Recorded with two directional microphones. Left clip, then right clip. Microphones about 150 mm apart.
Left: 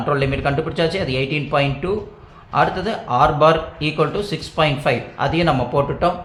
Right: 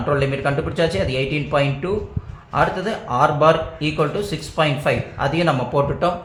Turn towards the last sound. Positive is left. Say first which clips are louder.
# left 1 dB
turn(degrees=5)  # may be behind; listen again after turning